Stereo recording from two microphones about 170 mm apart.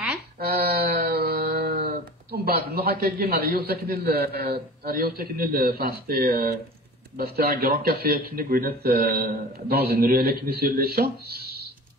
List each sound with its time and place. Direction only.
0.5 s music: 65° right (ahead or behind)
2.3 s a man's voice: 65° right (ahead or behind)